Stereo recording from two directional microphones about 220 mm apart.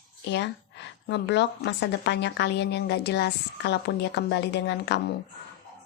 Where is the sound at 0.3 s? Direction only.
55° left (ahead or behind).